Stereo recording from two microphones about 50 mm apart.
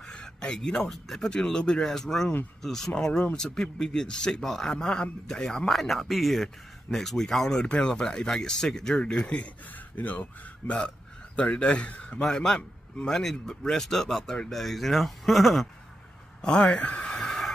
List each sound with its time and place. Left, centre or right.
0.1 s a sound: centre
0.8 s speech: centre
1.3 s speech: centre
9.9 s speech: left
11.3 s speech: left
12.2 s speech: centre
16.3 s a man's voice: centre
16.7 s speech: left
17.2 s train: centre